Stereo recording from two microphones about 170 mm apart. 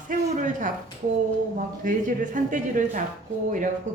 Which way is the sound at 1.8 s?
50° right (ahead or behind).